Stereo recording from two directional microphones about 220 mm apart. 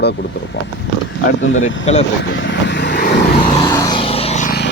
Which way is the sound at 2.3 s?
55° left (ahead or behind).